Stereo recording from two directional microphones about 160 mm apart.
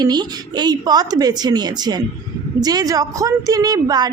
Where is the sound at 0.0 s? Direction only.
25° right (ahead or behind).